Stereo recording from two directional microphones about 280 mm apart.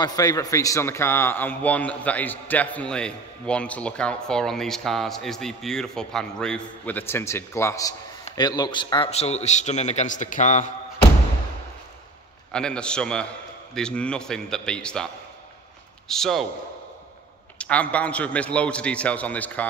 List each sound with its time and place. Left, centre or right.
0.0 s a man's voice: centre
12.5 s a man's voice: centre
16.1 s a man's voice: centre
17.6 s a man's voice: centre